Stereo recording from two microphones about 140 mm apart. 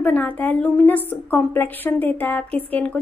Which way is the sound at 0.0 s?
10° left (ahead or behind).